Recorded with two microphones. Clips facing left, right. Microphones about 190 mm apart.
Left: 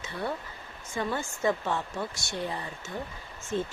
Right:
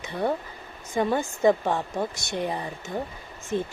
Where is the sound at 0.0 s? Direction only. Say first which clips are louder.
Right 6 dB; 15° right (ahead or behind).